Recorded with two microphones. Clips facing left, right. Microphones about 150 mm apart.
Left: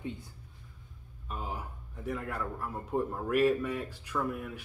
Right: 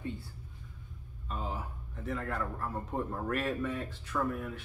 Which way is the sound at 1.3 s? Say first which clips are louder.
Right 1 dB; 10° left (ahead or behind).